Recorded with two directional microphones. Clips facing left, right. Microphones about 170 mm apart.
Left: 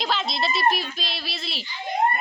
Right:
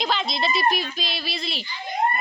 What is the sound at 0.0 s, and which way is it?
A child's voice, centre (ahead or behind).